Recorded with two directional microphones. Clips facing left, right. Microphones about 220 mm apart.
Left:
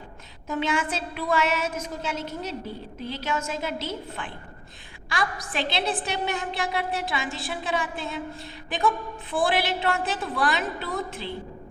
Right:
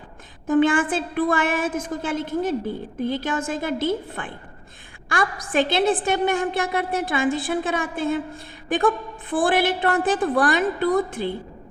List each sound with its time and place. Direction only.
0.4 s a woman's voice: 50° right (ahead or behind)
9.3 s a woman's voice: 50° right (ahead or behind)